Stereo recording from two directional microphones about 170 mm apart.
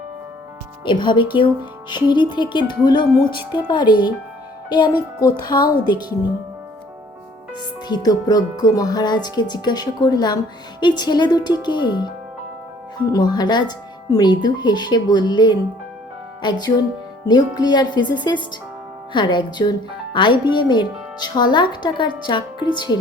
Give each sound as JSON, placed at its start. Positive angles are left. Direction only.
{"t": 0.9, "sound": "speech", "side_deg": 25}
{"t": 7.9, "sound": "speech", "side_deg": 25}